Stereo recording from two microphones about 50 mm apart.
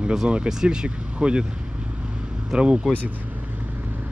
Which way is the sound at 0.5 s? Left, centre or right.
Centre.